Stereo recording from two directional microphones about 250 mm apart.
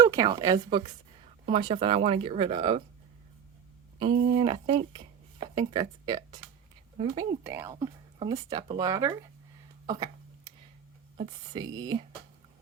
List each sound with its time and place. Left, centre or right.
0.0 s a woman's voice: centre
4.3 s speech: centre
9.8 s a sound: centre
11.2 s speech: right